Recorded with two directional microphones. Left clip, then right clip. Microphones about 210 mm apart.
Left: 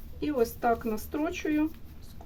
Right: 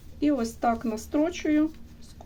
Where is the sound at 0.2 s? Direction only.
35° right (ahead or behind).